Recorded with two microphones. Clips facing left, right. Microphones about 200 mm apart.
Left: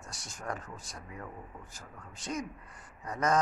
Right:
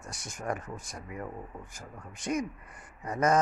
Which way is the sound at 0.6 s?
50° right (ahead or behind).